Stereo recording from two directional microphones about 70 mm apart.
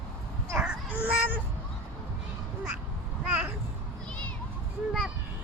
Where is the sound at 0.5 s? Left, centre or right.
Centre.